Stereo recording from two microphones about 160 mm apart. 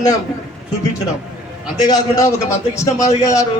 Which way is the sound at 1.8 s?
20° left (ahead or behind).